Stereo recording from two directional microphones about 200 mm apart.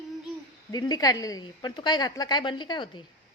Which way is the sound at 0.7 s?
20° left (ahead or behind).